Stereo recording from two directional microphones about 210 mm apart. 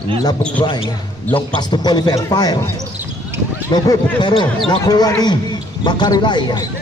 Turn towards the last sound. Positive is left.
turn(degrees=20)  # may be behind; listen again after turning